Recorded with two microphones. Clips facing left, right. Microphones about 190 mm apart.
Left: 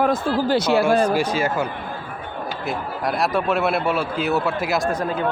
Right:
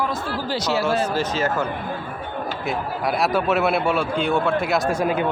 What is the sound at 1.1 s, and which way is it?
Speech, 10° left (ahead or behind).